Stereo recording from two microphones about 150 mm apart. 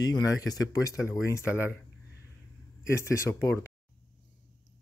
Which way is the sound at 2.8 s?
20° left (ahead or behind).